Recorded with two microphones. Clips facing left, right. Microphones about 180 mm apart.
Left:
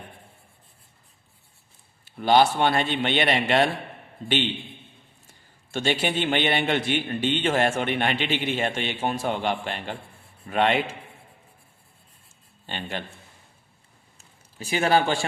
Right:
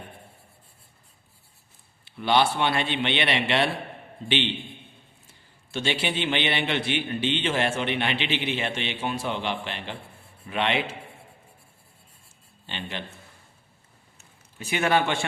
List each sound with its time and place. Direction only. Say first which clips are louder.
2.0 s a man's voice: left 3 dB; 45° left (ahead or behind)
5.7 s a man's voice: left 3 dB; 45° left (ahead or behind)
12.6 s a man's voice: left 2 dB; 45° left (ahead or behind)
14.2 s a sound: left 2 dB; 35° left (ahead or behind)